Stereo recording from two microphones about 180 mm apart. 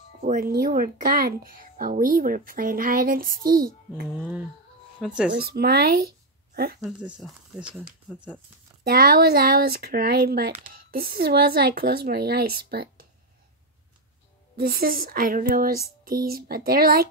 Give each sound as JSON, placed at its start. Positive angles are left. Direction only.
{"t": 0.2, "sound": "speech", "side_deg": -50}
{"t": 4.1, "sound": "speech", "side_deg": -5}
{"t": 5.3, "sound": "speech", "side_deg": -60}
{"t": 6.8, "sound": "speech", "side_deg": -5}
{"t": 8.8, "sound": "speech", "side_deg": -55}
{"t": 14.6, "sound": "speech", "side_deg": -55}